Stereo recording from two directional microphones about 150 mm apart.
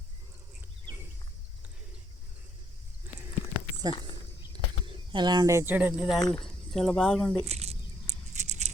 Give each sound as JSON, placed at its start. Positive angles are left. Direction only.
{"t": 4.1, "sound": "a sound", "side_deg": -30}
{"t": 6.3, "sound": "speech", "side_deg": 5}
{"t": 7.4, "sound": "speech", "side_deg": -45}
{"t": 8.3, "sound": "patter", "side_deg": -50}